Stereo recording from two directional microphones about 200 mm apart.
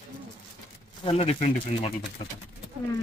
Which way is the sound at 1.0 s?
30° left (ahead or behind).